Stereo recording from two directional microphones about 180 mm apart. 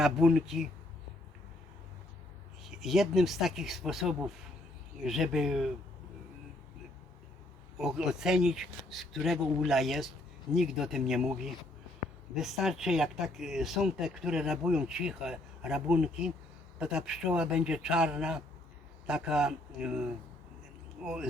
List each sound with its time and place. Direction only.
0.0 s speech: centre (ahead or behind)
2.6 s speech: centre (ahead or behind)
7.8 s speech: centre (ahead or behind)
12.4 s speech: centre (ahead or behind)